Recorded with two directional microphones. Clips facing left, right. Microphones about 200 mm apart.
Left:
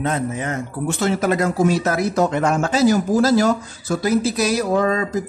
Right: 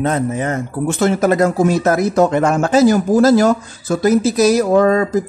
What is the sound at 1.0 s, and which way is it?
Speech, 45° right (ahead or behind).